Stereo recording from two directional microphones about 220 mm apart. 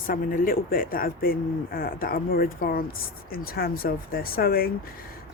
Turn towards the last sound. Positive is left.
turn(degrees=45)  # may be behind; listen again after turning